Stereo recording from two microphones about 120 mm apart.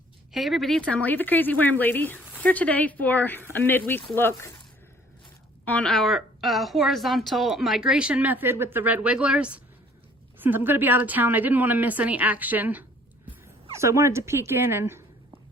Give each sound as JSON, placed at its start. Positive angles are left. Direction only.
{"t": 0.3, "sound": "speech", "side_deg": 0}
{"t": 5.6, "sound": "a woman's voice", "side_deg": 10}